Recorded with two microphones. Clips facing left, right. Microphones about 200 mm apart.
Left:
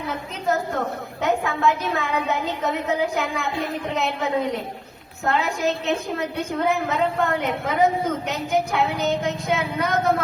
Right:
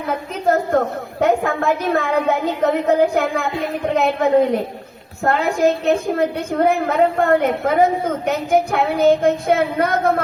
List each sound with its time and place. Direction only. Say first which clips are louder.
0.1 s a woman's voice: right 7 dB; 55° right (ahead or behind)